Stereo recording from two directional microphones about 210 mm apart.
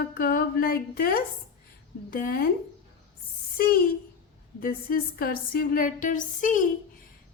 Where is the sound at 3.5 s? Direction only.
45° left (ahead or behind).